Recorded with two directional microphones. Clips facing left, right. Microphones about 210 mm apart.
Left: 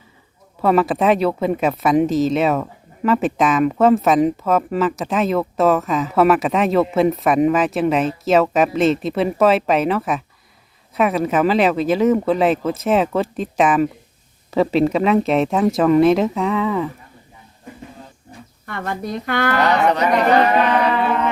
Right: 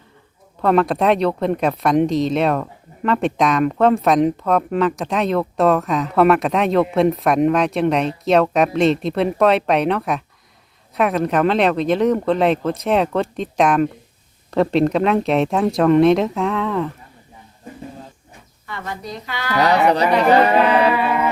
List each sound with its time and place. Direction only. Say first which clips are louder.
0.6 s speech: even; 5° left (ahead or behind)
18.6 s a woman's voice: left 4 dB; 55° left (ahead or behind)
19.9 s speech: right 1 dB; 35° right (ahead or behind)
20.6 s a sound: right 2 dB; 10° right (ahead or behind)